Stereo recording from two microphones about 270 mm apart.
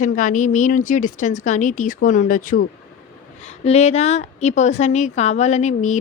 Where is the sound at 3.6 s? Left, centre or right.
Left.